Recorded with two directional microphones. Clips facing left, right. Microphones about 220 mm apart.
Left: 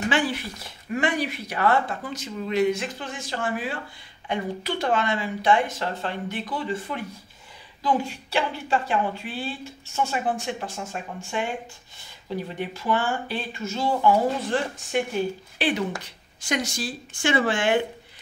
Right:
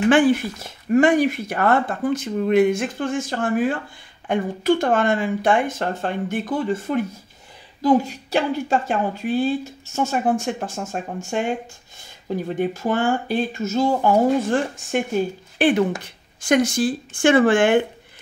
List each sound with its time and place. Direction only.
0.1 s speech: 50° right (ahead or behind)
12.5 s speech: 45° right (ahead or behind)